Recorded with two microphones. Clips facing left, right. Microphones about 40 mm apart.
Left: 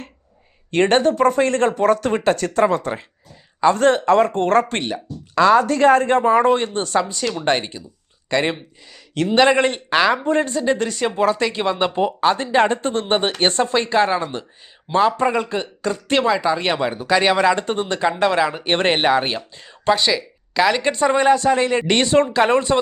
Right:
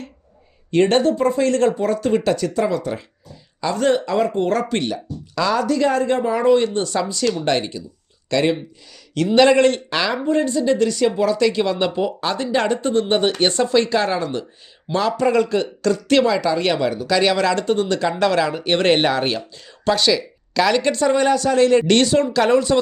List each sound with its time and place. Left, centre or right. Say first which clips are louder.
0.7 s speech: even; left
1.1 s speech: left 2 dB; left
1.4 s speech: even; left
1.7 s speech: left 2 dB; left
4.8 s speech: right 1 dB; left
9.4 s speech: right 2 dB; left
10.2 s speech: right 1 dB; left; by 18.7 s centre
18.7 s speech: right 3 dB; left
18.9 s speech: left 1 dB; centre
19.9 s speech: even; centre
20.9 s speech: left 1 dB; left
22.0 s speech: left 1 dB; left